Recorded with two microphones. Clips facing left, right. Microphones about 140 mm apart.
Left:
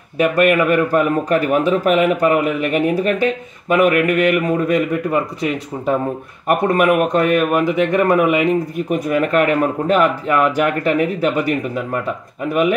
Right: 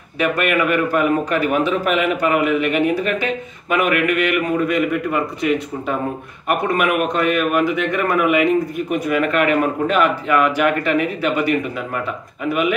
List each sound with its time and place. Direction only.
0.2 s a man's voice: 40° left (ahead or behind)